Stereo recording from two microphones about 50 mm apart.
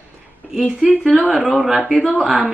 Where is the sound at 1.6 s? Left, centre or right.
Centre.